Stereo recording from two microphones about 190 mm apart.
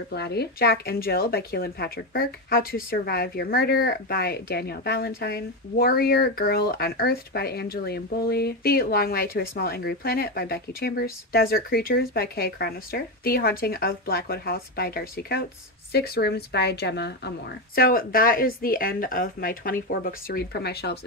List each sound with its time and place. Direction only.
0.1 s a woman's voice: 60° left (ahead or behind)
17.7 s speech: 50° left (ahead or behind)